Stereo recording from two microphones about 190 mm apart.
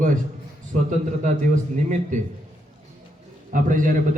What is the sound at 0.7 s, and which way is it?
A man's voice, 40° right (ahead or behind).